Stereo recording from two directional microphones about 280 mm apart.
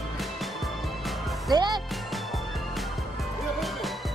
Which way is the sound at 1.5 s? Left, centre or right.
Centre.